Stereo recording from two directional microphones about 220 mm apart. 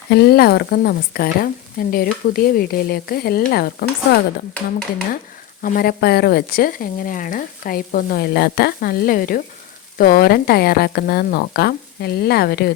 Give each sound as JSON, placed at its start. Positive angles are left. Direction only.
{"t": 0.1, "sound": "speech", "side_deg": 45}
{"t": 5.6, "sound": "speech", "side_deg": 40}